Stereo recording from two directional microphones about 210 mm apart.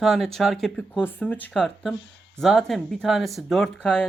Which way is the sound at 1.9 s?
60° left (ahead or behind).